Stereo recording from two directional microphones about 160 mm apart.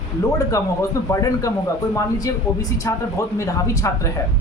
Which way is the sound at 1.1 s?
20° left (ahead or behind).